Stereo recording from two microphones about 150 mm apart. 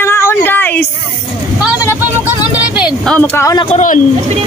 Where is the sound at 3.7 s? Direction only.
60° left (ahead or behind).